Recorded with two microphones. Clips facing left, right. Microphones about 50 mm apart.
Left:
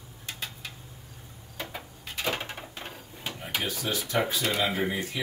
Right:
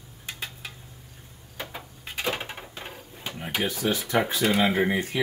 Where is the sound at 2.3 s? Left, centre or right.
Centre.